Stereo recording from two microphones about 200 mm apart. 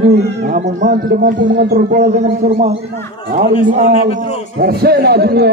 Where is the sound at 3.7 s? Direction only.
40° right (ahead or behind).